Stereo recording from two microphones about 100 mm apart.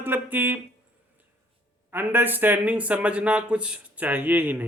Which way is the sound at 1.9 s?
20° right (ahead or behind).